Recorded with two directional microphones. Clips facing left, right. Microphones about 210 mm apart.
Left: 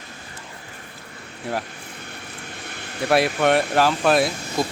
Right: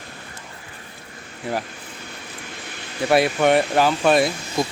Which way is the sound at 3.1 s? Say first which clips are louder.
Right 1 dB; centre (ahead or behind).